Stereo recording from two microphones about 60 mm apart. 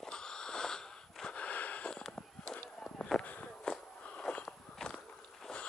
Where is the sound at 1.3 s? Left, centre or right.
Left.